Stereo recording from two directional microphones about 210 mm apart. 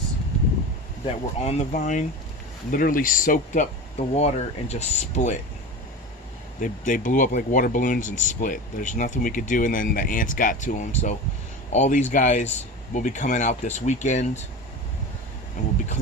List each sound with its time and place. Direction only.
1.0 s speech: 30° left (ahead or behind)
6.6 s speech: 40° left (ahead or behind)
15.6 s speech: 35° left (ahead or behind)